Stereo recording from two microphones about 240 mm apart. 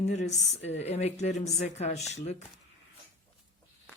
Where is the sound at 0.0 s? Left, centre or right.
Left.